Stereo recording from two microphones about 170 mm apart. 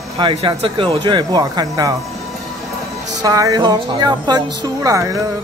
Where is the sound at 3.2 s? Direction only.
20° right (ahead or behind).